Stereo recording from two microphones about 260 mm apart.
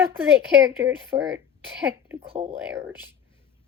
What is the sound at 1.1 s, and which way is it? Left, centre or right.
Speech, right.